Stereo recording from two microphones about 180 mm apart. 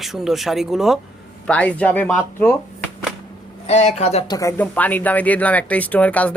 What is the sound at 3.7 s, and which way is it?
Speech, 35° left (ahead or behind).